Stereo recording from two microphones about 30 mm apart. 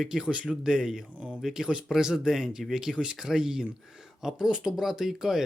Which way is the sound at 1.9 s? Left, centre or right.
Centre.